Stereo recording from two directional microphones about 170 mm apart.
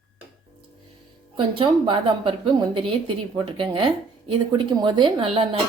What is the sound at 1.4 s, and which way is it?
A woman's voice, 30° right (ahead or behind).